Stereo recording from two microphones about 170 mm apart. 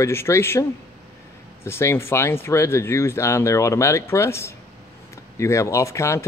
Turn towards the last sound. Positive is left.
turn(degrees=15)  # may be behind; listen again after turning